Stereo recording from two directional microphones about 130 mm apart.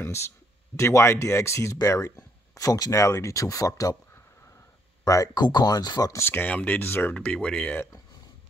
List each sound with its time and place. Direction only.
0.7 s speech: 20° left (ahead or behind)
5.0 s speech: 25° left (ahead or behind)
6.2 s speech: 15° left (ahead or behind)